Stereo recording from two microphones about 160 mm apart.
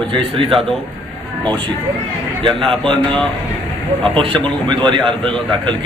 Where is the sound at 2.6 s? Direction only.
5° left (ahead or behind).